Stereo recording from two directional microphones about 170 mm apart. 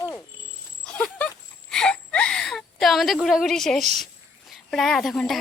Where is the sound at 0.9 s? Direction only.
5° left (ahead or behind).